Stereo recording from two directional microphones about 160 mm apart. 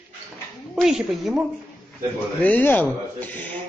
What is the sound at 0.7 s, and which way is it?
Speech, 5° right (ahead or behind).